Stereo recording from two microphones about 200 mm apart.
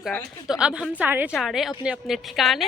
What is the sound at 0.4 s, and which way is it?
Speech, 5° right (ahead or behind).